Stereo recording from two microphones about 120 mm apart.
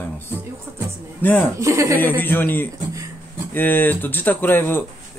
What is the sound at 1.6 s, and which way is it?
Speech, 25° right (ahead or behind).